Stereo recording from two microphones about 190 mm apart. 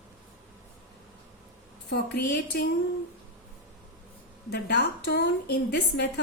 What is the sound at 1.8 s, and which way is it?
Speech, 65° left (ahead or behind).